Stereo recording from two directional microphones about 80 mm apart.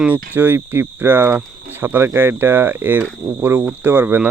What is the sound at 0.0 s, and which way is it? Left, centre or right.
Cricket, right.